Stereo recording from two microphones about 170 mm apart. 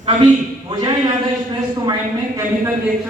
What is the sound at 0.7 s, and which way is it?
Speech, 25° right (ahead or behind).